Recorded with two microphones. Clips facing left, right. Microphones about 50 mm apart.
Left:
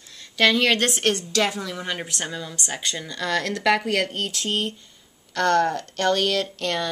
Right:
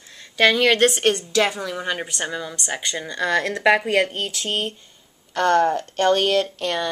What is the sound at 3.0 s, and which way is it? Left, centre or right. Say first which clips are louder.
Speech: right 5 dB; right.